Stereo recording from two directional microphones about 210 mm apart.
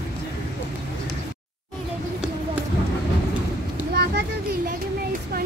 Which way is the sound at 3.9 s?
50° right (ahead or behind).